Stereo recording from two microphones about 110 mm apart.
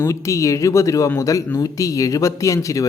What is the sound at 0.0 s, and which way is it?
Speech, 30° left (ahead or behind).